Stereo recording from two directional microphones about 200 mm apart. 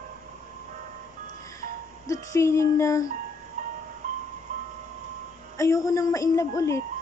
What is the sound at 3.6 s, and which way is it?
Music, 40° right (ahead or behind).